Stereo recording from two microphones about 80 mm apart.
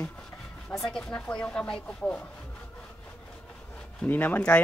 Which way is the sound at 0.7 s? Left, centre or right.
Centre.